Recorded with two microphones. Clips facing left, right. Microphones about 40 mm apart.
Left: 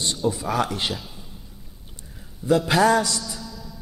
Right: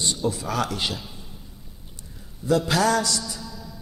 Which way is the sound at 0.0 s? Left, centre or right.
Centre.